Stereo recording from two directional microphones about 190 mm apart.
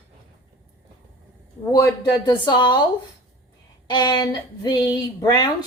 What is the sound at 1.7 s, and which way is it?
Speech, 15° left (ahead or behind).